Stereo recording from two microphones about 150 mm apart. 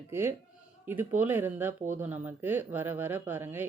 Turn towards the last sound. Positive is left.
turn(degrees=-15)  # may be behind; listen again after turning